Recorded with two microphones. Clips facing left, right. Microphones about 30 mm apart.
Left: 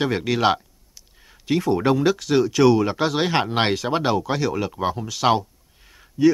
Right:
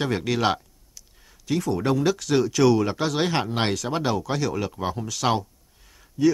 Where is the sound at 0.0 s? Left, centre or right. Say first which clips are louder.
Left 3 dB; centre.